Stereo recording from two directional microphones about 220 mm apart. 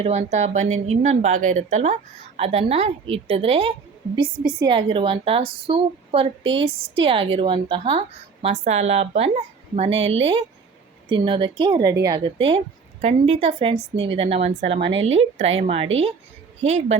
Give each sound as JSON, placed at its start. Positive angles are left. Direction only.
{"t": 0.0, "sound": "a woman's voice", "side_deg": -30}